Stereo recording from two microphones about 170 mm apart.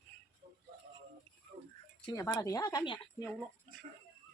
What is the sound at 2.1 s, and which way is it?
Speech, 20° left (ahead or behind).